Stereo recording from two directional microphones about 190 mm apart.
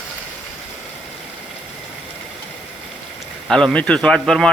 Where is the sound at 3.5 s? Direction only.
5° left (ahead or behind).